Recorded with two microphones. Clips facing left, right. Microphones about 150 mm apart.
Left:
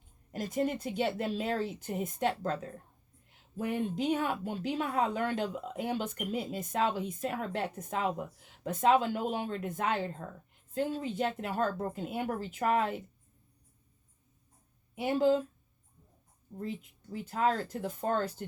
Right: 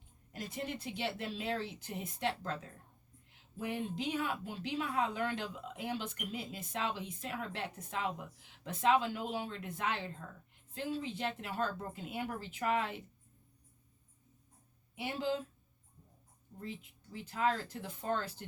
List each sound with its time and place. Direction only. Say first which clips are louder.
0.3 s a woman's voice: left 9 dB; 45° left (ahead or behind)
14.9 s a woman's voice: left 9 dB; 45° left (ahead or behind)
16.6 s a woman's voice: left 7 dB; 45° left (ahead or behind)